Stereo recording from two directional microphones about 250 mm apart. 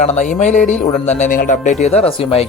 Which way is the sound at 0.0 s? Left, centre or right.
Left.